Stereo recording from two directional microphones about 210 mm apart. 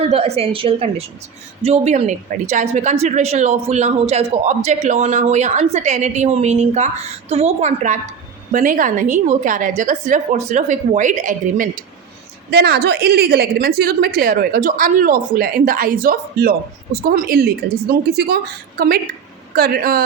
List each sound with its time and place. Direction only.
0.1 s a woman's voice: 30° right (ahead or behind)
12.5 s a woman's voice: 50° right (ahead or behind)
19.5 s a woman's voice: 45° right (ahead or behind)